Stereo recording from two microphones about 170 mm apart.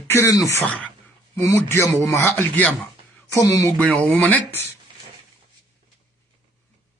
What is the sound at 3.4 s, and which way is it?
Speech, 20° left (ahead or behind).